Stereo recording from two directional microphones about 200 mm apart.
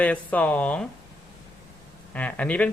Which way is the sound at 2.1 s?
5° left (ahead or behind).